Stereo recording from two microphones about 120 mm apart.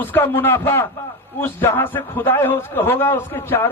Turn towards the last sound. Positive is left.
turn(degrees=20)  # may be behind; listen again after turning